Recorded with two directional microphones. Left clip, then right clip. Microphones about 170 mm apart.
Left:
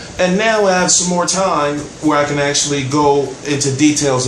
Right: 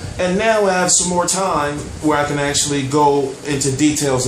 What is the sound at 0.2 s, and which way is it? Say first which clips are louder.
A man's voice: left 2 dB; centre (ahead or behind).